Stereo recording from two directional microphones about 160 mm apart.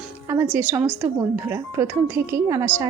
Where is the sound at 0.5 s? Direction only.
10° right (ahead or behind).